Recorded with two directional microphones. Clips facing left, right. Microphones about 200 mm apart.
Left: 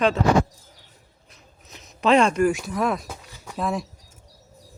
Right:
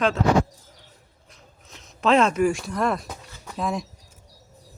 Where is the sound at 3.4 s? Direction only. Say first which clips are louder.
Left 1 dB; centre (ahead or behind).